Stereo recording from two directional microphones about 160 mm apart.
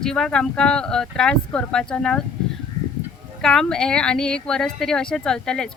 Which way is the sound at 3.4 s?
5° left (ahead or behind).